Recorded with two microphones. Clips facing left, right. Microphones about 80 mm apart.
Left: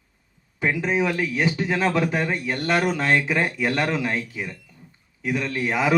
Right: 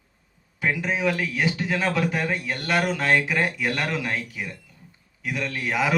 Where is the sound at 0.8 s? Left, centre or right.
Left.